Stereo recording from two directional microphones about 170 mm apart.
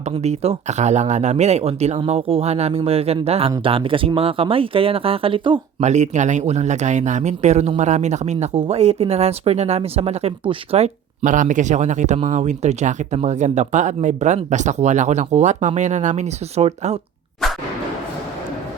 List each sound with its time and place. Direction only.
0.0 s speech: 40° right (ahead or behind)
5.8 s speech: 45° right (ahead or behind)